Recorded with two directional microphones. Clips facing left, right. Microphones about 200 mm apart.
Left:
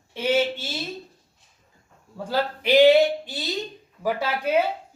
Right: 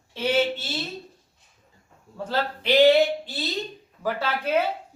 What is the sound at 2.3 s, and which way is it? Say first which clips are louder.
A man's voice: left 3 dB; 10° left (ahead or behind).